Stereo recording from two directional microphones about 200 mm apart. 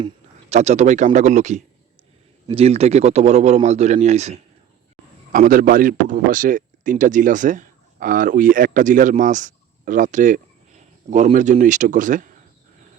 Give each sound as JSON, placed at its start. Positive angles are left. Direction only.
{"t": 0.5, "sound": "speech", "side_deg": -35}